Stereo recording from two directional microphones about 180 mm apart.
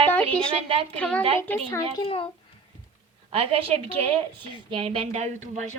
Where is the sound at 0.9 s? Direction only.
5° left (ahead or behind).